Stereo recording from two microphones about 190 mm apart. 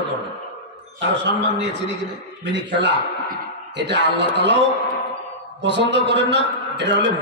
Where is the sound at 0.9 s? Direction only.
65° right (ahead or behind).